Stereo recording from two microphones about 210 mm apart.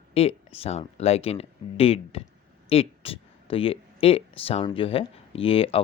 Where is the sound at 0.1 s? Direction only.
30° left (ahead or behind).